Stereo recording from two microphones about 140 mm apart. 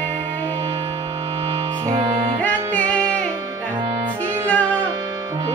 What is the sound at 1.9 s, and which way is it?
Music, 40° right (ahead or behind).